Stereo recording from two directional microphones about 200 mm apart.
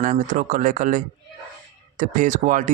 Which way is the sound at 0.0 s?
40° right (ahead or behind).